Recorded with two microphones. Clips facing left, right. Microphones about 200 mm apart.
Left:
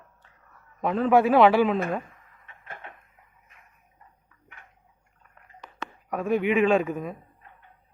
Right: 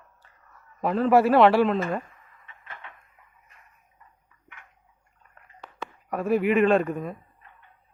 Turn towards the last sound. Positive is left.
turn(degrees=0)  # may be behind; listen again after turning